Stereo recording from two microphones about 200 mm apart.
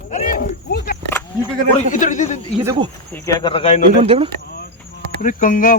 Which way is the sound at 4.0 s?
30° right (ahead or behind).